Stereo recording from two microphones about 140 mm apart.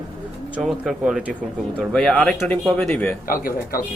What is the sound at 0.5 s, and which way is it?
Speech, centre (ahead or behind).